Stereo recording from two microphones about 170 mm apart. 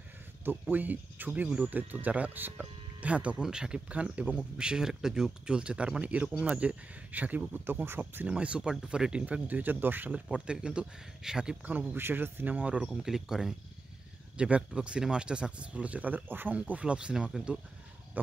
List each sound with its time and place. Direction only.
0.5 s speech: 10° right (ahead or behind)
18.2 s wild animals: 10° right (ahead or behind)